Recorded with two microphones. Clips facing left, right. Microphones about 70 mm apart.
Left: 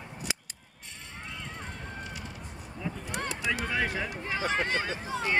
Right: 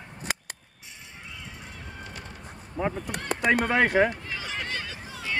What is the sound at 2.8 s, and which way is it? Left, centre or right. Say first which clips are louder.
Speech: right 6 dB; right.